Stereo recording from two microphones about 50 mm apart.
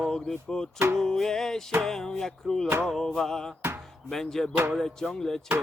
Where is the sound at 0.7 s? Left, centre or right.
Right.